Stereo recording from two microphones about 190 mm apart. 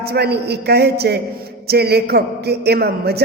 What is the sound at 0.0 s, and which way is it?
A man's voice, 55° right (ahead or behind).